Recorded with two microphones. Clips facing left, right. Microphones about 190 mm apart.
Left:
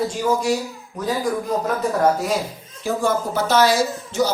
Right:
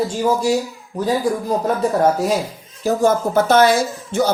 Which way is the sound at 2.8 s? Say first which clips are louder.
Right 5 dB; 40° right (ahead or behind).